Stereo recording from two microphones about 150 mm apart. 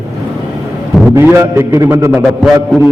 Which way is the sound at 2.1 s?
Centre (ahead or behind).